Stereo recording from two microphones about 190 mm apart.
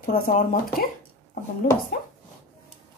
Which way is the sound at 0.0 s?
50° left (ahead or behind).